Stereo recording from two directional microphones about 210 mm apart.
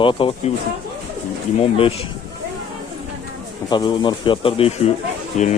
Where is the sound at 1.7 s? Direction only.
30° left (ahead or behind).